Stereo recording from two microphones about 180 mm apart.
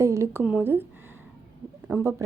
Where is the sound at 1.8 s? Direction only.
10° right (ahead or behind).